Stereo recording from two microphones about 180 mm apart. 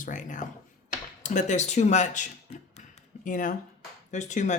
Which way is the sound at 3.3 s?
45° left (ahead or behind).